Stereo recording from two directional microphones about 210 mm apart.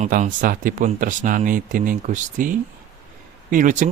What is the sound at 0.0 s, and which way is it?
Speech, 35° right (ahead or behind).